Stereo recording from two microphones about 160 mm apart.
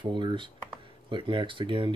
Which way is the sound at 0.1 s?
30° right (ahead or behind).